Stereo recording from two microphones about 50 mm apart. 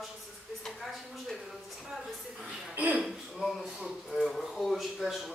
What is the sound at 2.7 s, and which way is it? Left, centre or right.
Speech, right.